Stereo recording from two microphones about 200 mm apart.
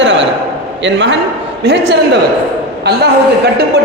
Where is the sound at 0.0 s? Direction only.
65° right (ahead or behind).